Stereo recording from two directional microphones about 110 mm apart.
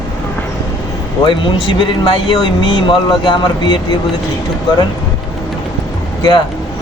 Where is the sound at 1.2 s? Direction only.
45° left (ahead or behind).